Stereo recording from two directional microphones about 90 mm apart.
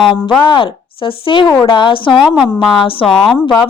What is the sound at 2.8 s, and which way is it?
Speech, 85° left.